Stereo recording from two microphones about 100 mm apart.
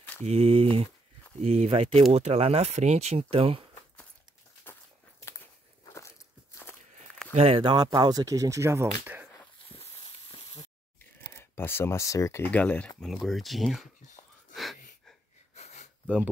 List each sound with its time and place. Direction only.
0.2 s speech: 90° right; by 3.6 s 70° right (ahead or behind)
5.9 s walk: 30° left (ahead or behind)
7.3 s speech: 70° right (ahead or behind)
7.7 s speech: 45° right (ahead or behind); by 9.3 s 20° right (ahead or behind)
10.3 s sizzle: 90° left
11.3 s speech: 20° left (ahead or behind)
12.4 s speech: 15° left (ahead or behind)
13.1 s speech: centre (ahead or behind)
14.5 s wheeze: centre (ahead or behind)
15.5 s a sound: 90° left